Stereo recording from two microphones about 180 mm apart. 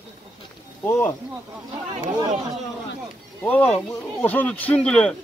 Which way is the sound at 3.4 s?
10° left (ahead or behind).